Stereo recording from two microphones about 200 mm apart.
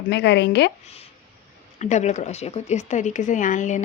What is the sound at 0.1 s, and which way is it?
Speech, 60° left (ahead or behind).